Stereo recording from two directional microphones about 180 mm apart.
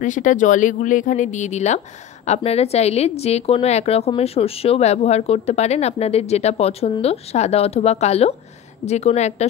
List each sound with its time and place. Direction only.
0.0 s a woman's voice: 45° left (ahead or behind)